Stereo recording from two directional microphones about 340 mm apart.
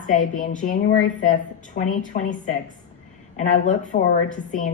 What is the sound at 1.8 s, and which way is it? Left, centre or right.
A woman's voice, left.